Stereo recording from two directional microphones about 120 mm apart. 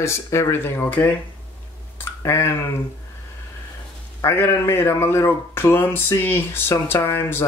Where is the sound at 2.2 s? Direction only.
20° left (ahead or behind).